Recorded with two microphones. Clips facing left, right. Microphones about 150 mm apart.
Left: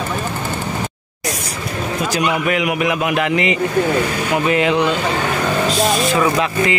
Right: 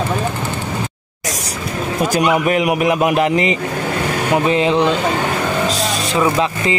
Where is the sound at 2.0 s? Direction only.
45° right (ahead or behind).